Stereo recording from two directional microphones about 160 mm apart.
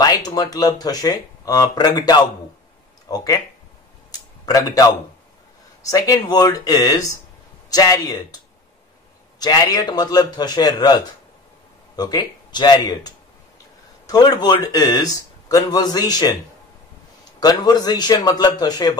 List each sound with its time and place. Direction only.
0.0 s a man's voice: 25° left (ahead or behind)
4.1 s a sound: 20° left (ahead or behind)
5.8 s a man's voice: 20° left (ahead or behind)
9.4 s a man's voice: 25° left (ahead or behind)
17.4 s a man's voice: 25° left (ahead or behind)